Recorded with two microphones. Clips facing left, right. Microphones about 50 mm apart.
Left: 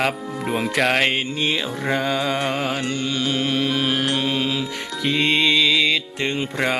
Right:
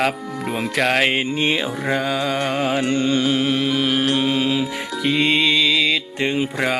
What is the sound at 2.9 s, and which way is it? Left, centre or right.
Carnatic music, right.